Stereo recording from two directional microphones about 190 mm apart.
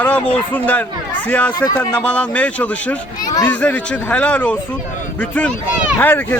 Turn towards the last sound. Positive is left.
turn(degrees=10)  # may be behind; listen again after turning